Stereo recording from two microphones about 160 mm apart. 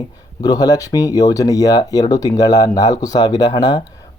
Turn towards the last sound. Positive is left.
turn(degrees=25)  # may be behind; listen again after turning